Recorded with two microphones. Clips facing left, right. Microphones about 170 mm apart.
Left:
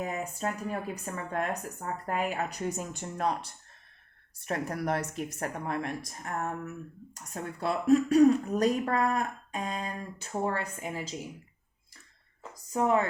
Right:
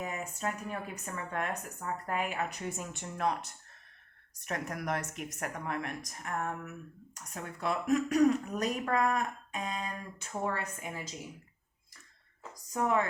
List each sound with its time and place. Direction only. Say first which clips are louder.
0.0 s speech: left 3 dB; 35° left (ahead or behind)
12.7 s speech: left 4 dB; 25° left (ahead or behind)